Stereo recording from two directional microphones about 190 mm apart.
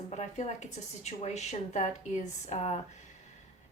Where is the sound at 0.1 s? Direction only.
35° left (ahead or behind).